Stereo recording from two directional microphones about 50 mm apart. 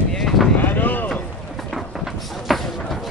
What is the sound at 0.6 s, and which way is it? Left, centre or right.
Boat, left.